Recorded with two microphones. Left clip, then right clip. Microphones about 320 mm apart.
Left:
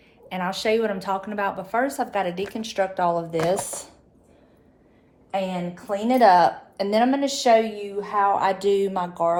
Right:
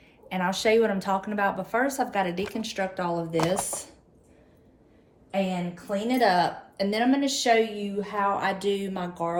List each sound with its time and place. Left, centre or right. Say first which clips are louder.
0.3 s a woman's voice: even; centre
5.3 s a woman's voice: left 2 dB; centre